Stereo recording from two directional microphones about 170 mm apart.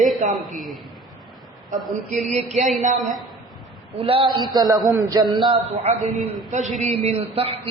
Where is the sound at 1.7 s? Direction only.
50° right (ahead or behind).